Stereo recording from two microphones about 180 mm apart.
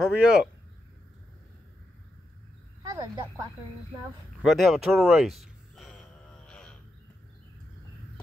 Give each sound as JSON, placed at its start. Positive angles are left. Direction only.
{"t": 0.0, "sound": "speech", "side_deg": -5}
{"t": 2.8, "sound": "speech", "side_deg": -20}
{"t": 4.4, "sound": "speech", "side_deg": 0}
{"t": 6.4, "sound": "a sound", "side_deg": 5}